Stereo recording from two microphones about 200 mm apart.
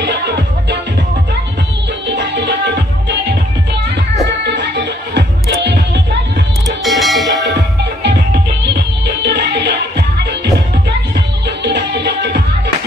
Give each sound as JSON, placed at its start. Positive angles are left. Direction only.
{"t": 2.0, "sound": "music", "side_deg": -60}
{"t": 4.6, "sound": "music", "side_deg": -60}
{"t": 6.8, "sound": "music", "side_deg": 0}
{"t": 9.0, "sound": "music", "side_deg": -60}